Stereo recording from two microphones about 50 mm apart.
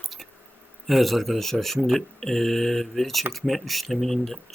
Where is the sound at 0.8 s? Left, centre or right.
Centre.